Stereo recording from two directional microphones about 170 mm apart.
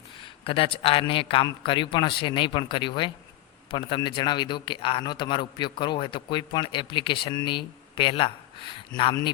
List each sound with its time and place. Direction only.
0.2 s a man's voice: 30° left (ahead or behind)